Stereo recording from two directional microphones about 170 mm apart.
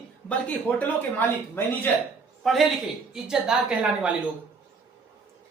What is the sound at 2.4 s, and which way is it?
A man's voice, centre (ahead or behind).